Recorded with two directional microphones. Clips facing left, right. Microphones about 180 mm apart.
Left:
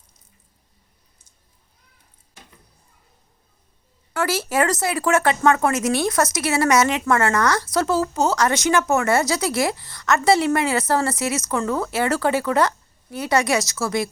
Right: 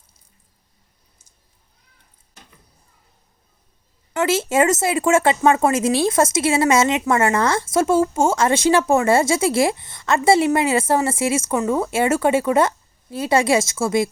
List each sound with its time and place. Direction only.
4.1 s speech: 20° right (ahead or behind)